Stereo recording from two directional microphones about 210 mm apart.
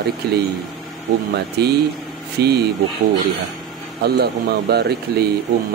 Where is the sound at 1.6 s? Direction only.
50° right (ahead or behind).